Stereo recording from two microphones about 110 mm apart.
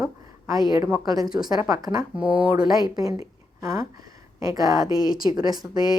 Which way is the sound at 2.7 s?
35° right (ahead or behind).